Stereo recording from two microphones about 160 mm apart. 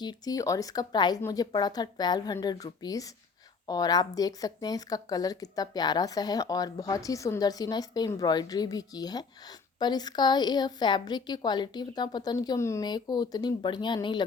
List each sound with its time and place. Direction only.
0.0 s a woman's voice: 25° left (ahead or behind)